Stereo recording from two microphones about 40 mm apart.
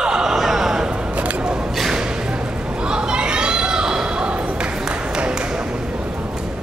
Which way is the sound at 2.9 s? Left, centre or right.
Right.